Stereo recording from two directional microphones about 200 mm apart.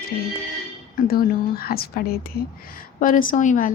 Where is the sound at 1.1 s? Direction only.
50° left (ahead or behind).